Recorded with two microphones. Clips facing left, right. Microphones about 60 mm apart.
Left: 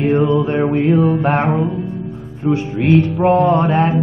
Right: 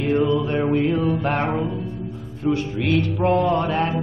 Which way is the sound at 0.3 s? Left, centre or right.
Left.